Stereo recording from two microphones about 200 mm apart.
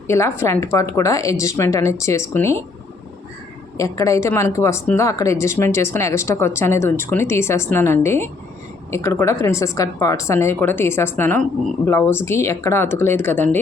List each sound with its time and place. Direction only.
0.1 s speech: 15° left (ahead or behind)
3.8 s speech: 15° left (ahead or behind)